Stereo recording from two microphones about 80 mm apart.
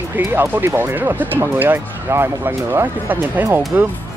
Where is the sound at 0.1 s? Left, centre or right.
Right.